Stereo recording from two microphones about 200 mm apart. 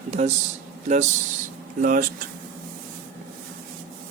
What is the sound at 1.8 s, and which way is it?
Speech, 45° right (ahead or behind).